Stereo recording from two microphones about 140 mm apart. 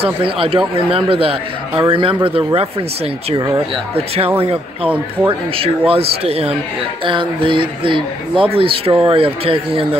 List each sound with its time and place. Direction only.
0.0 s speech: 40° right (ahead or behind)
4.8 s speech: 10° right (ahead or behind)
5.6 s speech: 45° right (ahead or behind)